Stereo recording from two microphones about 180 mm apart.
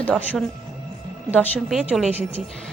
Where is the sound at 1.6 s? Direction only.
5° right (ahead or behind).